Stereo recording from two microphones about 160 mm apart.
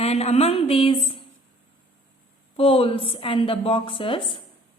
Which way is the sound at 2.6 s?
35° left (ahead or behind).